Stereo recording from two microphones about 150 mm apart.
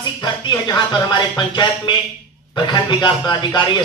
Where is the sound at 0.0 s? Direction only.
30° left (ahead or behind).